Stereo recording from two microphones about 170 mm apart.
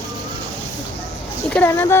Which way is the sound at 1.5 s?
15° left (ahead or behind).